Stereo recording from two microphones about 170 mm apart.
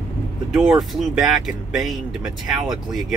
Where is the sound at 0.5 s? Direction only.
Centre (ahead or behind).